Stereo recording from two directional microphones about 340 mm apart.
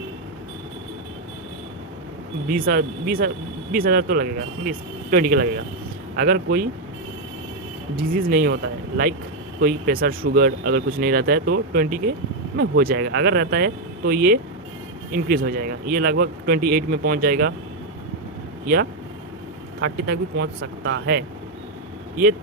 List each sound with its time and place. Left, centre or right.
2.5 s speech: right
7.9 s speech: right
9.6 s speech: right
18.6 s speech: right